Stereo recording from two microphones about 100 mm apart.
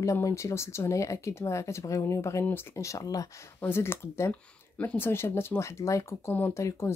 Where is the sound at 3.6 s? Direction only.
25° left (ahead or behind).